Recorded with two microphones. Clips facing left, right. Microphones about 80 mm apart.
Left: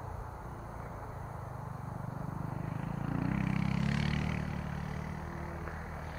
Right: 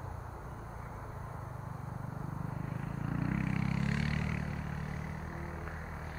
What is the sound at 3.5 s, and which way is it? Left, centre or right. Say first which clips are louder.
Vehicle: left 1 dB; right.